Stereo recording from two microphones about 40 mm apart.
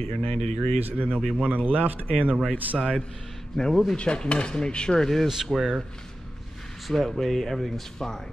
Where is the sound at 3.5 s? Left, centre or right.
Centre.